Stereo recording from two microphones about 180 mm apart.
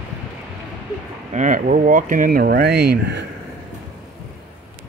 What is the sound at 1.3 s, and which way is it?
Speech, 45° right (ahead or behind).